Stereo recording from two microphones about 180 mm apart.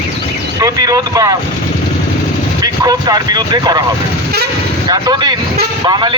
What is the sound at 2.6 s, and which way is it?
Speech, 20° right (ahead or behind).